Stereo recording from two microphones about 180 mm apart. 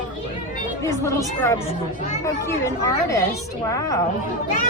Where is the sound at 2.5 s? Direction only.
15° left (ahead or behind).